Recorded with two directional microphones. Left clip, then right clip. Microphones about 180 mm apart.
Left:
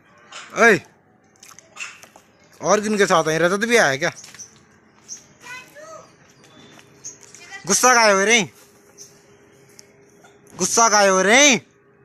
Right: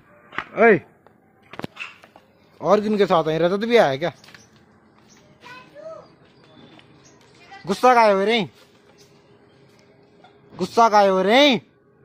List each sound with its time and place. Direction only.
0.5 s speech: 5° left (ahead or behind)
2.6 s speech: 5° right (ahead or behind)
7.6 s speech: centre (ahead or behind)
10.5 s speech: centre (ahead or behind)